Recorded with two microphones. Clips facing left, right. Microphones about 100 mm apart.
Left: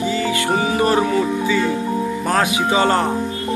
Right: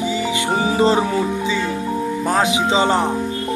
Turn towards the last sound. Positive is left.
turn(degrees=-20)  # may be behind; listen again after turning